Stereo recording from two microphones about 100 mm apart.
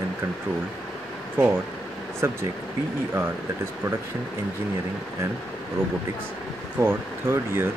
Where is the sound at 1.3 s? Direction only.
20° right (ahead or behind).